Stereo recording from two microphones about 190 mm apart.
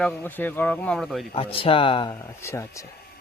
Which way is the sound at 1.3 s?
30° left (ahead or behind).